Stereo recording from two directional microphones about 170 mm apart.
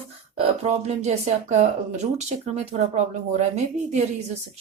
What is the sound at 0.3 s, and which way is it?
Speech, 35° right (ahead or behind).